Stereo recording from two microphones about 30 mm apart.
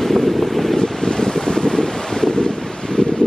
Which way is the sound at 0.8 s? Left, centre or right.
Left.